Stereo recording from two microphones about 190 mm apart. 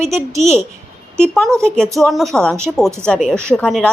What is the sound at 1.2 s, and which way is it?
Speech, 5° left (ahead or behind).